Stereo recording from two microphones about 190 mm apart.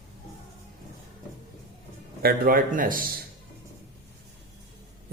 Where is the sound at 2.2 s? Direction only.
50° right (ahead or behind).